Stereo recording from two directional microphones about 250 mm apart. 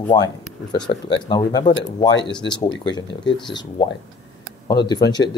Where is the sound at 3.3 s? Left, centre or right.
Centre.